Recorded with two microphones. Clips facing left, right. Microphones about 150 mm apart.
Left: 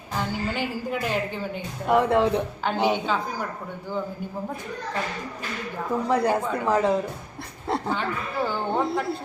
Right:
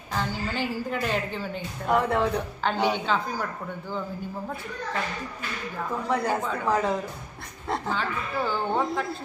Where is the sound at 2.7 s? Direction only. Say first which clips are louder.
Left 2 dB; 15° left (ahead or behind).